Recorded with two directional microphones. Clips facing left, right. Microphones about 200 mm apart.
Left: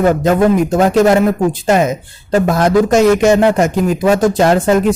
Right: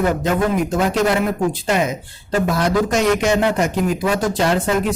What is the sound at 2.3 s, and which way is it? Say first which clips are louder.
Speech: left 6 dB; 50° left (ahead or behind).